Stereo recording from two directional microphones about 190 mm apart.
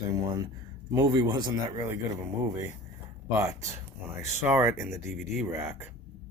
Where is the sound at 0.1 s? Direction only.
20° right (ahead or behind).